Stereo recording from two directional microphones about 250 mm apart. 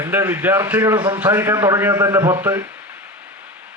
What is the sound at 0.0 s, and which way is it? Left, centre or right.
A man's voice, centre.